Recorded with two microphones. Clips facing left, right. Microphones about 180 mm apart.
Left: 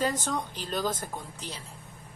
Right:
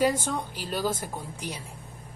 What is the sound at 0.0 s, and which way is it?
A woman's voice, 10° right (ahead or behind).